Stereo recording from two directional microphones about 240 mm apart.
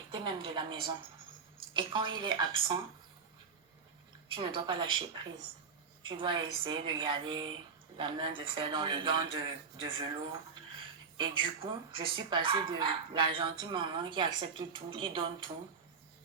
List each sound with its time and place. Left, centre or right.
0.1 s speech: centre
4.4 s speech: centre
11.2 s speech: centre